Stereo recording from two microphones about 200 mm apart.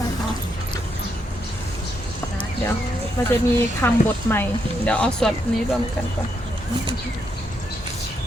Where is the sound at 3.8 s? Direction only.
10° left (ahead or behind).